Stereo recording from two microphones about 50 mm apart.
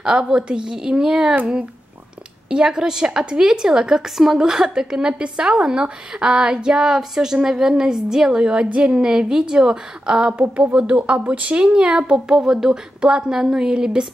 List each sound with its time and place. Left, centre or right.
0.0 s a woman's voice: centre
2.5 s a woman's voice: centre
10.3 s speech: right; by 14.0 s centre